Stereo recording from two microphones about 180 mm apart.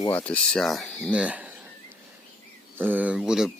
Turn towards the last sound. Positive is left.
turn(degrees=-5)  # may be behind; listen again after turning